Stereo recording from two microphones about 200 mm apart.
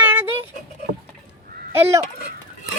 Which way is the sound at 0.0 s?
10° right (ahead or behind).